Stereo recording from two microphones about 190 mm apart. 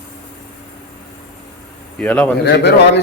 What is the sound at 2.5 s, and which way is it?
Speech, 65° left (ahead or behind).